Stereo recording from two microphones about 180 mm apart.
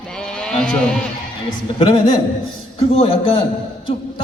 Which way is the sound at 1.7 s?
30° left (ahead or behind).